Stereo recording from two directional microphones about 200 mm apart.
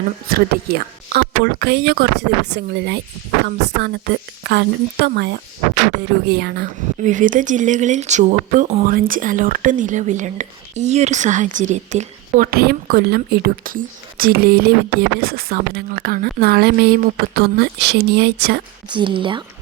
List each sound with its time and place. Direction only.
0.3 s speech: 50° right (ahead or behind)
7.0 s speech: 40° right (ahead or behind)
8.9 s speech: 45° right (ahead or behind)
18.9 s speech: 25° right (ahead or behind)